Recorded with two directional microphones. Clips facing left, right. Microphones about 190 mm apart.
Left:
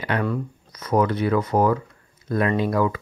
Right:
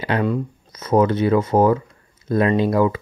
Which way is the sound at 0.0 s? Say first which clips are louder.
Right 4 dB; 25° right (ahead or behind).